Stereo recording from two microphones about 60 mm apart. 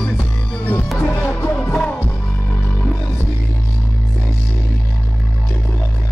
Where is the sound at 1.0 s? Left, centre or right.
Left.